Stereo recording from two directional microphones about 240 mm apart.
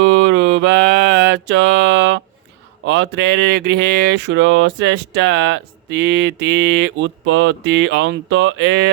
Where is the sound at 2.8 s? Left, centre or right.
Right.